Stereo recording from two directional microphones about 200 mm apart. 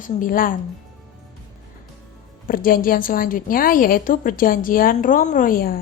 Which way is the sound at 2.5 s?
45° left (ahead or behind).